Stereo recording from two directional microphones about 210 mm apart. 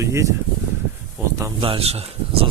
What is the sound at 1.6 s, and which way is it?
Speech, 25° right (ahead or behind).